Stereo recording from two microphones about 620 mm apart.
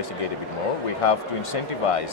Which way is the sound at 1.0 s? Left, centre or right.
Left.